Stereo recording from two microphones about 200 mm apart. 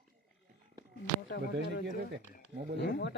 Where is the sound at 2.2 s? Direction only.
35° left (ahead or behind).